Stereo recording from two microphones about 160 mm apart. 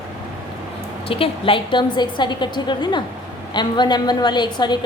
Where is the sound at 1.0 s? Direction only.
35° left (ahead or behind).